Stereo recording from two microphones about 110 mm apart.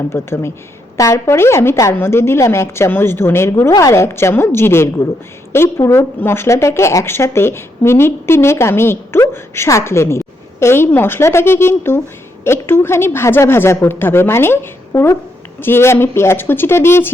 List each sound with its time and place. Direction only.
0.1 s a woman's voice: 25° left (ahead or behind)